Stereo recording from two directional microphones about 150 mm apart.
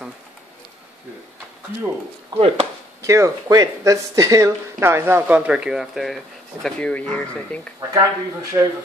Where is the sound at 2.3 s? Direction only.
25° right (ahead or behind); by 7.7 s 10° left (ahead or behind).